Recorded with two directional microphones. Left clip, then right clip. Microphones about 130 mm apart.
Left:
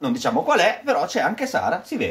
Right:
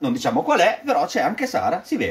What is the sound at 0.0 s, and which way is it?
Speech, 35° left (ahead or behind).